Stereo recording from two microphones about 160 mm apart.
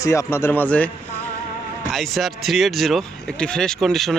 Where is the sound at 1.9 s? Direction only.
Centre (ahead or behind).